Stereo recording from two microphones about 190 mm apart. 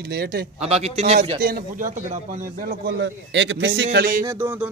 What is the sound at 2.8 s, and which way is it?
A man's voice, 70° right (ahead or behind).